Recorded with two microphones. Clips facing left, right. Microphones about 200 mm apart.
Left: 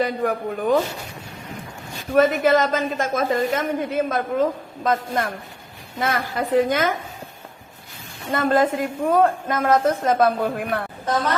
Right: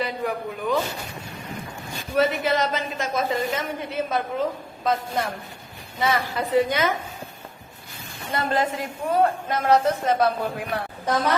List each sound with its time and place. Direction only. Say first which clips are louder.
0.0 s speech: left 5 dB; 50° left (ahead or behind)
2.1 s a woman's voice: left 5 dB; 50° left (ahead or behind)
8.3 s a woman's voice: left 5 dB; 50° left (ahead or behind)